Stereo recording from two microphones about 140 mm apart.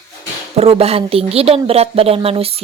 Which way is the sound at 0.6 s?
45° right (ahead or behind).